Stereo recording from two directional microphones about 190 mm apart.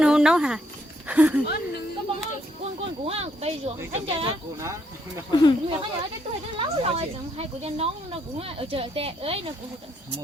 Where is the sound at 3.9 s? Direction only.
30° right (ahead or behind).